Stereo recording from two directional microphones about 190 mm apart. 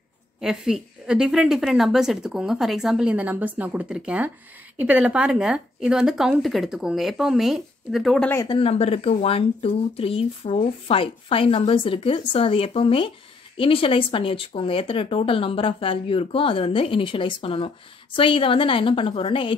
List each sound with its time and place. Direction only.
0.4 s speech: 5° right (ahead or behind)
8.4 s speech: 25° left (ahead or behind)